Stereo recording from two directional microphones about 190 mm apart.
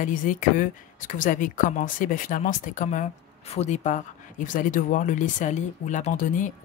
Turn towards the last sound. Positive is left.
turn(degrees=45)  # may be behind; listen again after turning